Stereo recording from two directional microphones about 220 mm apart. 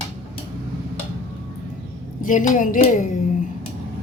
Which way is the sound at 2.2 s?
35° left (ahead or behind).